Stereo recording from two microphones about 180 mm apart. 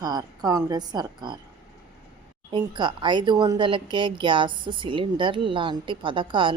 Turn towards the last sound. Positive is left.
turn(degrees=-30)  # may be behind; listen again after turning